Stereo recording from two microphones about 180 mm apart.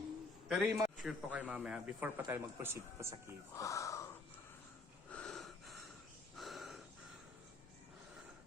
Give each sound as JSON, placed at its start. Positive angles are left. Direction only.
{"t": 0.4, "sound": "a man's voice", "side_deg": 0}
{"t": 3.5, "sound": "speech", "side_deg": 15}
{"t": 5.1, "sound": "wheeze", "side_deg": 5}
{"t": 6.3, "sound": "a sound", "side_deg": 0}